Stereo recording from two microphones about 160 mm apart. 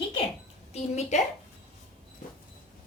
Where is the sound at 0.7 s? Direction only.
45° left (ahead or behind).